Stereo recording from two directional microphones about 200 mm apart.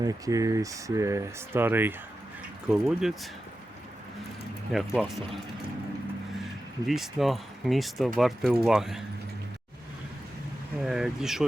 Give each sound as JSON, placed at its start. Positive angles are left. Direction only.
{"t": 0.0, "sound": "speech", "side_deg": -15}
{"t": 4.7, "sound": "speech", "side_deg": 0}
{"t": 6.8, "sound": "speech", "side_deg": 0}
{"t": 10.8, "sound": "speech", "side_deg": 0}